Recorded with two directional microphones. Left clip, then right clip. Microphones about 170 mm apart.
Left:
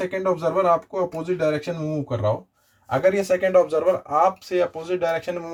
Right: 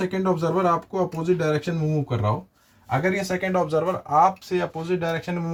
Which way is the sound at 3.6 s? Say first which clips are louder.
Left 3 dB; 55° left (ahead or behind).